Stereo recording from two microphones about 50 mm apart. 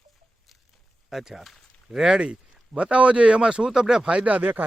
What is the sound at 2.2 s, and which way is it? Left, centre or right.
A man's voice, right.